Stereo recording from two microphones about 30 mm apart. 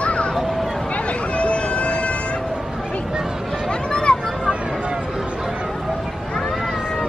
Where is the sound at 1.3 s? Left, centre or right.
Left.